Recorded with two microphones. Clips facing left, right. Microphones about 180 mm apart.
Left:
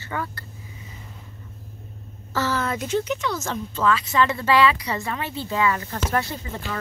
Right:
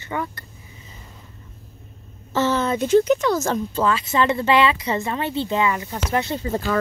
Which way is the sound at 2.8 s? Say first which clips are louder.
Right 8 dB; 40° right (ahead or behind).